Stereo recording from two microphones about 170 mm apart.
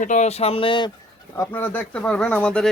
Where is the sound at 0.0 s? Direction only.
45° left (ahead or behind); by 0.9 s 30° left (ahead or behind).